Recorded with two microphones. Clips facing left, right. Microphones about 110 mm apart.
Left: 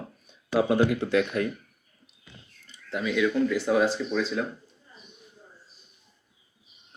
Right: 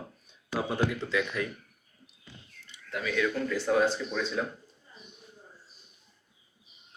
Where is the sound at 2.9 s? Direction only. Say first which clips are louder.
Left 4 dB; 20° left (ahead or behind).